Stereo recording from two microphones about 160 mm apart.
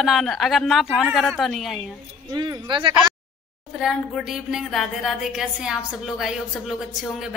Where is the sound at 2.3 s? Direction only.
30° right (ahead or behind).